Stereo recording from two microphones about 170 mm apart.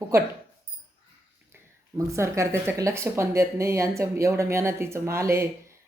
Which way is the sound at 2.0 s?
15° right (ahead or behind).